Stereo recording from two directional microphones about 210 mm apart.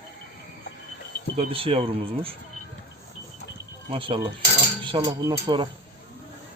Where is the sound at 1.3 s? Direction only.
25° right (ahead or behind).